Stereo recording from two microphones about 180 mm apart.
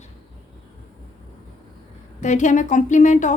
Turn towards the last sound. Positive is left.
turn(degrees=40)  # may be behind; listen again after turning